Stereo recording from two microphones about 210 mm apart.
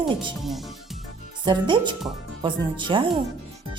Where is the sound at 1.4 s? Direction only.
20° right (ahead or behind).